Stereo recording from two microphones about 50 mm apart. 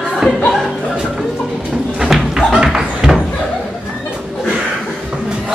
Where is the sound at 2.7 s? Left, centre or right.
Centre.